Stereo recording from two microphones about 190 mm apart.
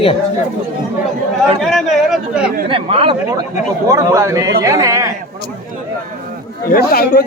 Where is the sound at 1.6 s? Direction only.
Centre (ahead or behind).